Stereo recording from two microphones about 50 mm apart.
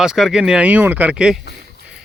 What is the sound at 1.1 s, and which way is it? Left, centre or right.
Speech, centre.